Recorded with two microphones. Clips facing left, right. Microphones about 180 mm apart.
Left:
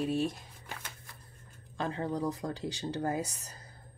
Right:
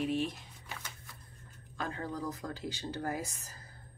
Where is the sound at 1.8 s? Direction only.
30° left (ahead or behind).